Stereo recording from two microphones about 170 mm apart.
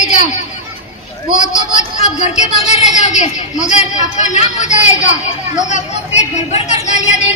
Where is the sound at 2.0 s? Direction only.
40° left (ahead or behind).